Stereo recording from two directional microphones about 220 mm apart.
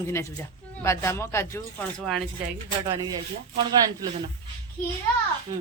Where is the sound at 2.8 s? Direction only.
20° right (ahead or behind).